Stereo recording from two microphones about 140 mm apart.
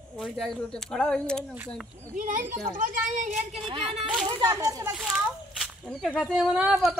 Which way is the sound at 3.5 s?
40° right (ahead or behind).